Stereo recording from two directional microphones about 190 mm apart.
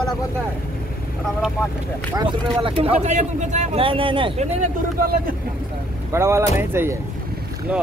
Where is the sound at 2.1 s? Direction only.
30° right (ahead or behind).